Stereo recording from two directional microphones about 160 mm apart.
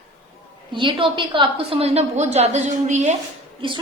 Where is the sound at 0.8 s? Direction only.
30° right (ahead or behind).